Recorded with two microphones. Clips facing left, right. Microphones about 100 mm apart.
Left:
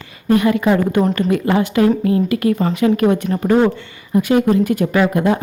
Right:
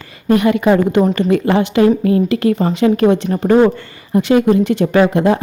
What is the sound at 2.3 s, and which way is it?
Speech, 30° right (ahead or behind).